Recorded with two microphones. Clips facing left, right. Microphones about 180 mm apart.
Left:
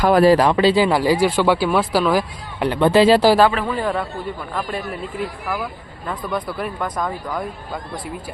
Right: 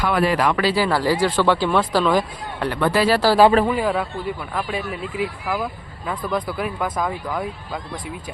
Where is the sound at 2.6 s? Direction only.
20° left (ahead or behind).